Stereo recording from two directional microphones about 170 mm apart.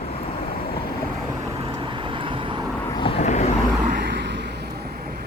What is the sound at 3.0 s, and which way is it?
Vehicle, 35° left (ahead or behind).